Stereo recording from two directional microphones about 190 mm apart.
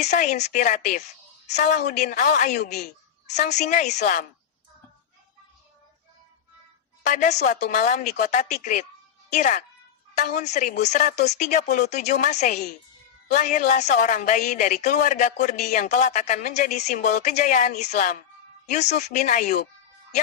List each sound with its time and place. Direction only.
0.0 s speech: 40° left (ahead or behind)
7.0 s speech: 40° left (ahead or behind)